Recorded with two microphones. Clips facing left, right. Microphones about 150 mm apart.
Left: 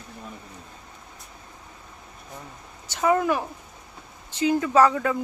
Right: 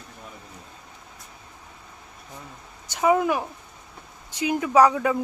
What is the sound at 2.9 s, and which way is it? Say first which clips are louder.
Speech: right 1 dB; 10° right (ahead or behind).